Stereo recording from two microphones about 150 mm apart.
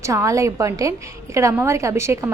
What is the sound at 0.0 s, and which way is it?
A woman's voice, 20° right (ahead or behind).